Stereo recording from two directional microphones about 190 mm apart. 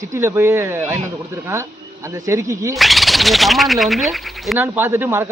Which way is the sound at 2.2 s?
15° right (ahead or behind).